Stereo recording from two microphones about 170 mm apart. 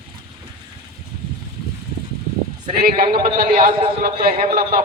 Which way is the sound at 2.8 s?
60° right (ahead or behind).